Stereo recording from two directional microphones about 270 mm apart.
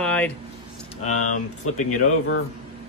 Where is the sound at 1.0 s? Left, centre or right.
Left.